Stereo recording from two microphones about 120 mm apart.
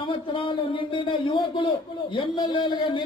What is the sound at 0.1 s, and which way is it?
Speech, 45° left (ahead or behind).